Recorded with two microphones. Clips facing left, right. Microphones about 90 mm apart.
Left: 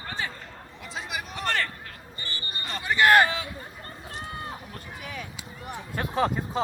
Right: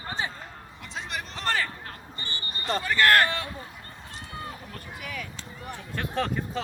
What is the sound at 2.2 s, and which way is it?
Basketball bounce, 35° right (ahead or behind).